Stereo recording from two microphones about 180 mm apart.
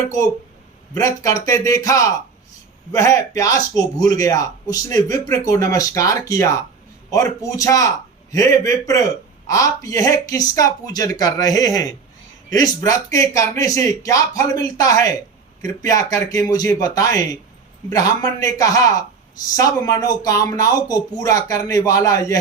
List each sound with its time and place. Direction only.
0.9 s speech: 20° left (ahead or behind)